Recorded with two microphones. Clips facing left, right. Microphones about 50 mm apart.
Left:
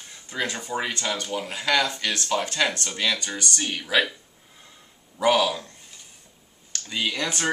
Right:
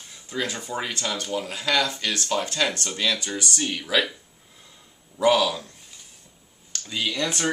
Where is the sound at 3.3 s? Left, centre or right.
Centre.